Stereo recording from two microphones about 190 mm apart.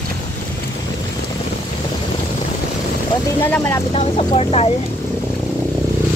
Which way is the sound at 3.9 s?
30° left (ahead or behind).